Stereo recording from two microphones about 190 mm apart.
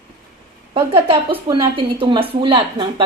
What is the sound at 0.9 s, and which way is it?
Speech, 25° right (ahead or behind).